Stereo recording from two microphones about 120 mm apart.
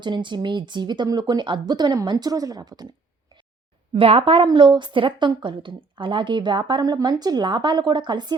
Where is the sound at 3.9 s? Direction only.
50° right (ahead or behind).